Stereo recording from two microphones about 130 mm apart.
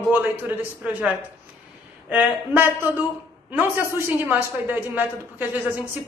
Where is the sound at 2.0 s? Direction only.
10° right (ahead or behind).